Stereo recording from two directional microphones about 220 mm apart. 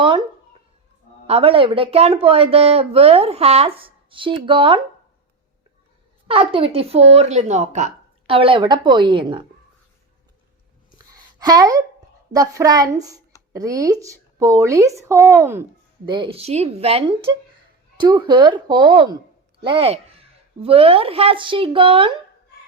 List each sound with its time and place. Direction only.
0.0 s speech: 20° right (ahead or behind)
1.3 s speech: 25° right (ahead or behind)
6.2 s speech: 25° right (ahead or behind)
10.9 s a sound: 15° right (ahead or behind)
12.3 s speech: 15° right (ahead or behind)